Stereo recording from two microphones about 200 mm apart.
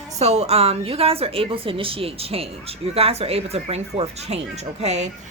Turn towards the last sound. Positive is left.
turn(degrees=-35)  # may be behind; listen again after turning